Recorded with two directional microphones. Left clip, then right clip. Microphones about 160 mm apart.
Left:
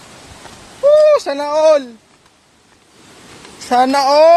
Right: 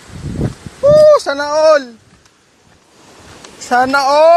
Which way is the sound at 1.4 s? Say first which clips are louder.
Right 1 dB; centre (ahead or behind).